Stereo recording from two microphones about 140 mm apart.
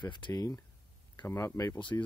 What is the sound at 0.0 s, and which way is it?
Speech, 30° left (ahead or behind).